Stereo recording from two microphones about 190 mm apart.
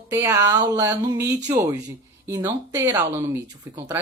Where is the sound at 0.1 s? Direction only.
15° right (ahead or behind).